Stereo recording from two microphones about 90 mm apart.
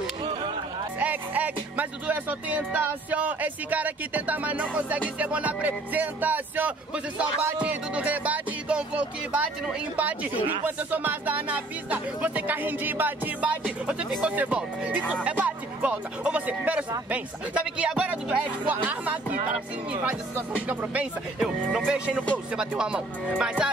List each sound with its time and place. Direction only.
0.2 s a sound: 70° right (ahead or behind)
0.9 s speech: 20° right (ahead or behind)
21.4 s speech: 5° right (ahead or behind)